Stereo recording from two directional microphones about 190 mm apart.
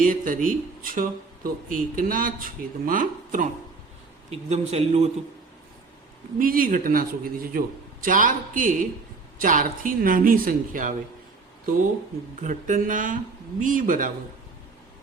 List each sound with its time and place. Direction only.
0.0 s a sound: 45° right (ahead or behind)
0.4 s speech: 45° right (ahead or behind)
4.3 s a man's voice: 35° right (ahead or behind)
6.4 s speech: 50° right (ahead or behind)
12.4 s speech: 40° right (ahead or behind)